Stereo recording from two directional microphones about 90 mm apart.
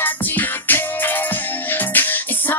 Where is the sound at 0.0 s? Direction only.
20° left (ahead or behind).